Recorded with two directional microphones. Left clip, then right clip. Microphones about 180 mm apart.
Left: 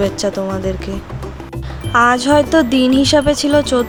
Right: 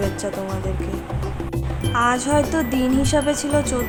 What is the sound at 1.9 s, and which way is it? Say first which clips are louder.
Speech: left 8 dB; 35° left (ahead or behind).